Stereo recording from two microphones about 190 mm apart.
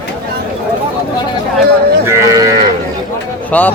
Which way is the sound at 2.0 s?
15° right (ahead or behind).